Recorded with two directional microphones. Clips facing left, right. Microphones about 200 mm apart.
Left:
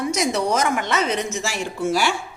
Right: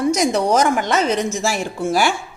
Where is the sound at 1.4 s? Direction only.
50° right (ahead or behind).